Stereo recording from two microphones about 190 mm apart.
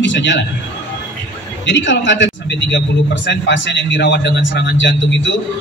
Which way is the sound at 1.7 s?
70° left (ahead or behind).